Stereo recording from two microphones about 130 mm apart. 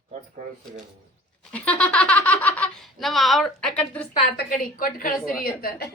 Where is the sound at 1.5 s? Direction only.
10° left (ahead or behind).